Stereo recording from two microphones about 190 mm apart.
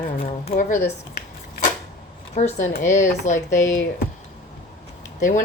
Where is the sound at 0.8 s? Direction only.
55° left (ahead or behind).